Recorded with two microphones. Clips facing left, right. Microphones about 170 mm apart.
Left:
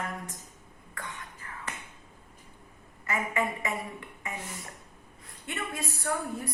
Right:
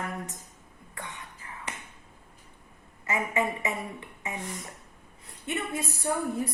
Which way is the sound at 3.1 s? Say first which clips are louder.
Right 2 dB; 20° right (ahead or behind).